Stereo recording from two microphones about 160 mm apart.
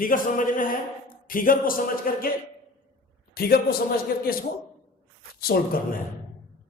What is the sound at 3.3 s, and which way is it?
A man's voice, 70° left (ahead or behind).